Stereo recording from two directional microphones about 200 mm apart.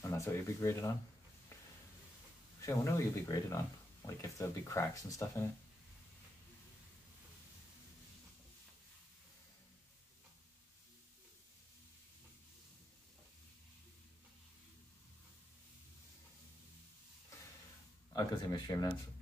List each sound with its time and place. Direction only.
0.0 s speech: 15° left (ahead or behind)
2.6 s speech: 15° left (ahead or behind)
18.1 s speech: 20° left (ahead or behind)